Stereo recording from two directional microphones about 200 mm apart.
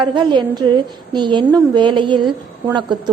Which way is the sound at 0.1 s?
25° right (ahead or behind).